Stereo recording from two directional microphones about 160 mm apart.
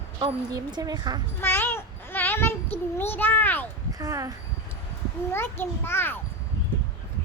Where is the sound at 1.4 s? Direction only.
15° left (ahead or behind).